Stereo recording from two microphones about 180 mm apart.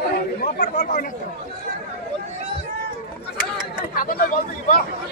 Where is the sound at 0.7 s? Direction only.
45° left (ahead or behind).